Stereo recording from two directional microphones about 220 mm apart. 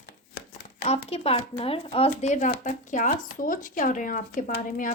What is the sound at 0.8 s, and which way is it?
Speech, 25° left (ahead or behind).